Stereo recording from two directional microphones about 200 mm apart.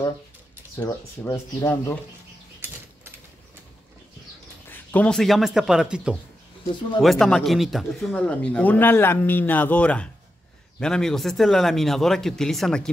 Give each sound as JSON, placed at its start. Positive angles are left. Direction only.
{"t": 0.7, "sound": "speech", "side_deg": 10}
{"t": 4.6, "sound": "speech", "side_deg": 5}
{"t": 6.6, "sound": "speech", "side_deg": 25}
{"t": 7.0, "sound": "speech", "side_deg": 0}